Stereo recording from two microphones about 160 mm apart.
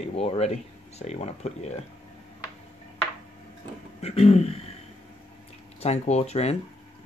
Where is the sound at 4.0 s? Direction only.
40° left (ahead or behind).